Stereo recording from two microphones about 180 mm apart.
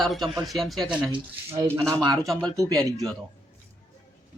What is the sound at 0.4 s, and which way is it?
Speech, centre (ahead or behind).